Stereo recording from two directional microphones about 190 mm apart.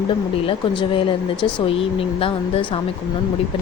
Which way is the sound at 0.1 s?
25° left (ahead or behind).